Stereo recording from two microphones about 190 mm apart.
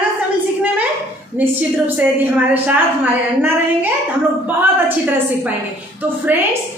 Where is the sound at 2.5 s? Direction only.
10° right (ahead or behind).